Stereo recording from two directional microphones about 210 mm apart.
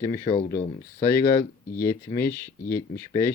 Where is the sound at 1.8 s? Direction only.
10° left (ahead or behind).